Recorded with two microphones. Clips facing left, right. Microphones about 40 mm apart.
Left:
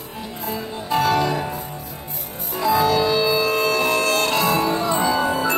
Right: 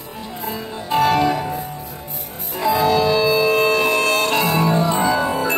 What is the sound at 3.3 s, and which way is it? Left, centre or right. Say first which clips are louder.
Music: right 3 dB; centre.